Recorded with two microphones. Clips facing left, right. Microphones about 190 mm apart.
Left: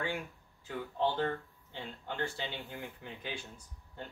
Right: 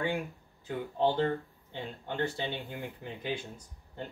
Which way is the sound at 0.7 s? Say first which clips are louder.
Right 4 dB; 15° right (ahead or behind).